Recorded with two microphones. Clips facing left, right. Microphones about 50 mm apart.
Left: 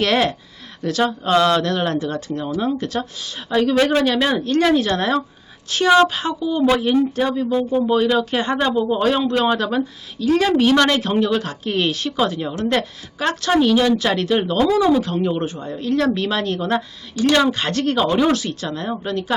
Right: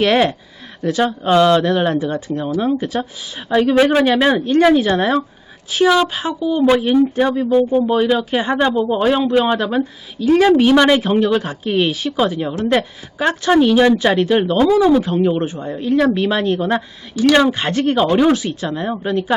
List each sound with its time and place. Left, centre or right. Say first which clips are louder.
0.0 s speech: right 4 dB; centre